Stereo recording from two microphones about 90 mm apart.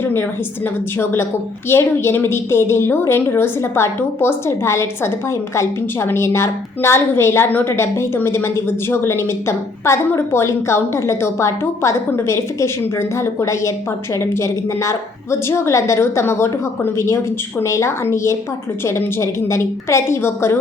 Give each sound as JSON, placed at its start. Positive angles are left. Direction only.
{"t": 0.0, "sound": "a woman's voice", "side_deg": 25}